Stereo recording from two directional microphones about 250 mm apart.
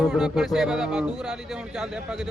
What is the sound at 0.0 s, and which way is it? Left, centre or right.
Speech, centre.